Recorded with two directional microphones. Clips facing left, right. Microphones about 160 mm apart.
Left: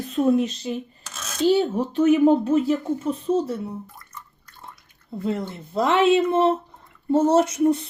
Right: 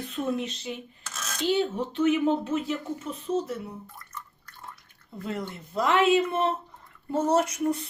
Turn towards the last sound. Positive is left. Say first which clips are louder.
# left 7 dB
turn(degrees=25)  # may be behind; listen again after turning